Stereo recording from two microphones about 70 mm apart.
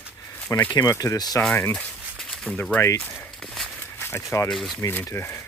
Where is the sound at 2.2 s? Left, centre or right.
Centre.